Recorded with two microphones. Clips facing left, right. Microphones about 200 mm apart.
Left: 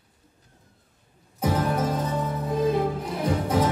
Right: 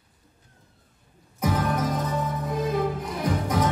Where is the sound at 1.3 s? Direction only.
30° left (ahead or behind).